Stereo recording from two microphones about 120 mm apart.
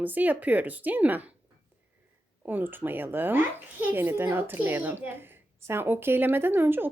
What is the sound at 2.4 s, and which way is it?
A woman's voice, 15° right (ahead or behind).